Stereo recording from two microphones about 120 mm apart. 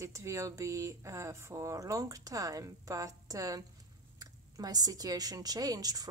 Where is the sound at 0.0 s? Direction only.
25° right (ahead or behind).